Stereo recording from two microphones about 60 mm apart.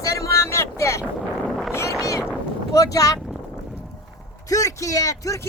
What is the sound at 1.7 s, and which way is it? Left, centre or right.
Boat, left.